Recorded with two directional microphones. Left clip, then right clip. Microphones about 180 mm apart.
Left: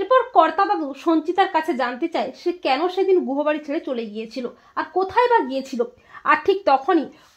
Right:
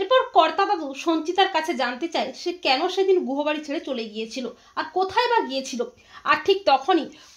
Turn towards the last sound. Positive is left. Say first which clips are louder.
# left 1 dB
turn(degrees=40)  # may be behind; listen again after turning